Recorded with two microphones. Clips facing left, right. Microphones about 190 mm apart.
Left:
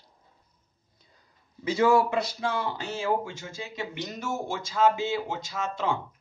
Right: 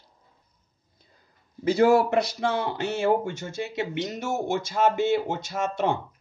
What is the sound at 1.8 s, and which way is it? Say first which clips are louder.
Speech: right 3 dB; 40° right (ahead or behind).